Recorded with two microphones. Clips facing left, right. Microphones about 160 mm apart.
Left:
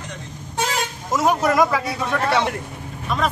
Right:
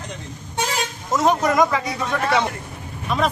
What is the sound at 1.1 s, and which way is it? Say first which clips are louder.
Speech: even; 5° left (ahead or behind).